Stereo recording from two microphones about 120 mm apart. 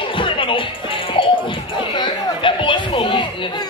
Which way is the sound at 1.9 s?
45° left (ahead or behind).